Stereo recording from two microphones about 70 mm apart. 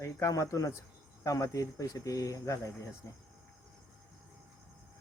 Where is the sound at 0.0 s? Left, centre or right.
Left.